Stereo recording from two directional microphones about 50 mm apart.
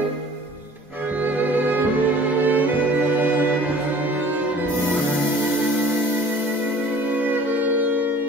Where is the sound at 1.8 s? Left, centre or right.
Right.